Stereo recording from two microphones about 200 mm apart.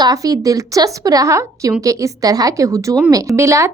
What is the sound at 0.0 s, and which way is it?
A woman's voice, 20° right (ahead or behind).